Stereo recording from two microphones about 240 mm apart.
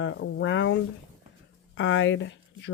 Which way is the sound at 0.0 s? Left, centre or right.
Left.